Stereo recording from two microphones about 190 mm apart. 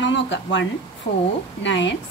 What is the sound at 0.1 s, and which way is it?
A woman's voice, 75° left (ahead or behind).